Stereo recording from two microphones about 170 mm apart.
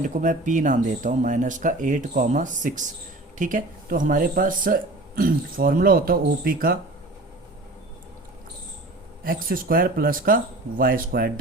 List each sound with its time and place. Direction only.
0.0 s speech: 50° right (ahead or behind)
9.2 s speech: 55° right (ahead or behind)